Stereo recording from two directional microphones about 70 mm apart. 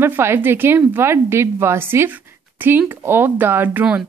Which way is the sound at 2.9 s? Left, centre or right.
Right.